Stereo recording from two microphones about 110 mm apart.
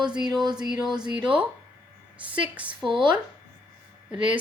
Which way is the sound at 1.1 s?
10° right (ahead or behind).